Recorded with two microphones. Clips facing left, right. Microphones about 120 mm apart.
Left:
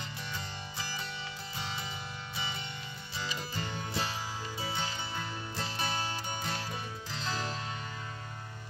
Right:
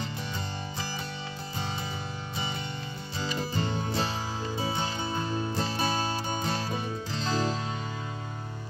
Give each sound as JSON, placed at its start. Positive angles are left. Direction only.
{"t": 3.2, "sound": "music", "side_deg": -35}